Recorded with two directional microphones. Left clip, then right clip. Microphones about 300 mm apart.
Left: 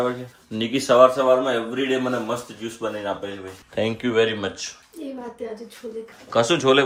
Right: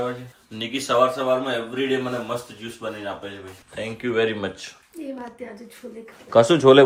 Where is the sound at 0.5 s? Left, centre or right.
Left.